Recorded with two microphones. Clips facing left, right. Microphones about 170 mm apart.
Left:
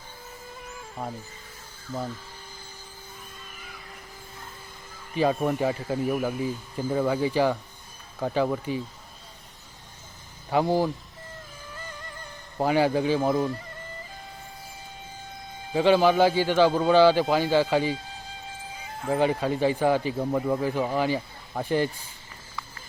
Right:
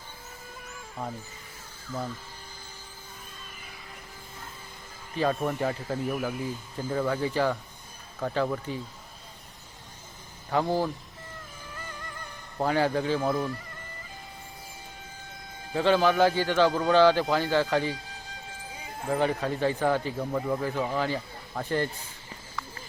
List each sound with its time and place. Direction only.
1.0 s speech: 10° left (ahead or behind)
5.1 s speech: 15° left (ahead or behind)
10.5 s speech: 15° left (ahead or behind)
12.5 s speech: 15° left (ahead or behind)
15.7 s speech: 15° left (ahead or behind)
19.1 s speech: 15° left (ahead or behind)